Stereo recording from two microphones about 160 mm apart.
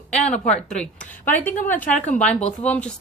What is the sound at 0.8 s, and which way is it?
A woman's voice, 10° left (ahead or behind).